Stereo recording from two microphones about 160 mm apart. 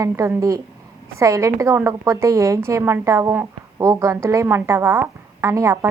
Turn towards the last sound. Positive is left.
turn(degrees=-20)  # may be behind; listen again after turning